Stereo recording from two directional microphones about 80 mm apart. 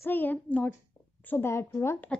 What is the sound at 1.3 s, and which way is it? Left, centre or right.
Speech, left.